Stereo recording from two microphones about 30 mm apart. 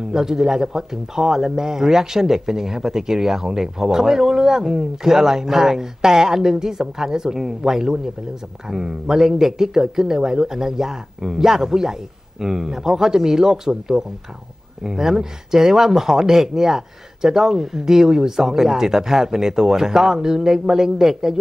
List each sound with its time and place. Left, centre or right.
0.1 s speech: centre